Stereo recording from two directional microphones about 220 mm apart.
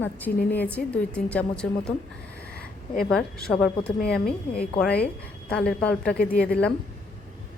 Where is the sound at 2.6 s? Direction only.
40° left (ahead or behind).